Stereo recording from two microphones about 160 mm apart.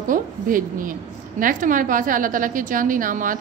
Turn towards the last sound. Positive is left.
turn(degrees=-55)  # may be behind; listen again after turning